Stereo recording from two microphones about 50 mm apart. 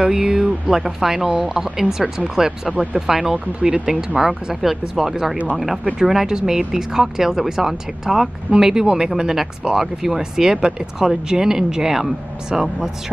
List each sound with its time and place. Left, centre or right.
0.0 s speech: centre
2.7 s speech: right
3.1 s speech: centre